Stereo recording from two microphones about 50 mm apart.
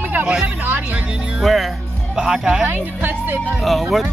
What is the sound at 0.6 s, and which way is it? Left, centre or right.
Speech, right.